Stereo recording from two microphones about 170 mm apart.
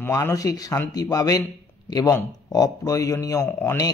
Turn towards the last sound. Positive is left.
turn(degrees=15)  # may be behind; listen again after turning